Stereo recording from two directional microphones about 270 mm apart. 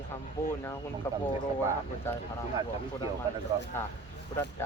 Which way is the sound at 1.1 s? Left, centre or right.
Centre.